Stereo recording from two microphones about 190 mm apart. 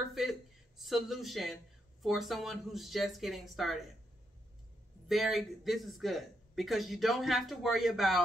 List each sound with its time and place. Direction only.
0.1 s speech: centre (ahead or behind)
5.0 s speech: centre (ahead or behind)